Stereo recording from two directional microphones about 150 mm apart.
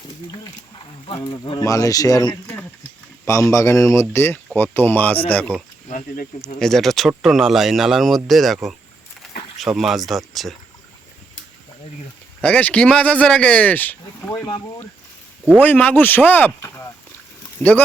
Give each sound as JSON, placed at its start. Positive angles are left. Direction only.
{"t": 1.0, "sound": "speech", "side_deg": 35}
{"t": 1.6, "sound": "speech", "side_deg": 20}
{"t": 3.5, "sound": "speech", "side_deg": 20}
{"t": 9.6, "sound": "speech", "side_deg": 0}
{"t": 12.4, "sound": "speech", "side_deg": 10}
{"t": 15.6, "sound": "speech", "side_deg": 10}